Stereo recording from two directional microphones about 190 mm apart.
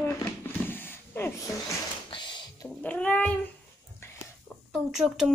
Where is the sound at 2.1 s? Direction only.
25° left (ahead or behind).